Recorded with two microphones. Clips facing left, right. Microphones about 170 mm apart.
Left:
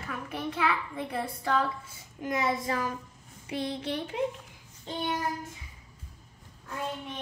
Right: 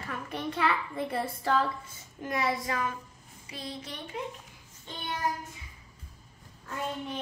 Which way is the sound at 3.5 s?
60° left (ahead or behind).